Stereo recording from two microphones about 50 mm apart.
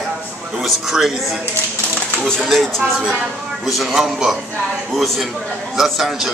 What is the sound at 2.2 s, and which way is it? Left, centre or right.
Speech, centre.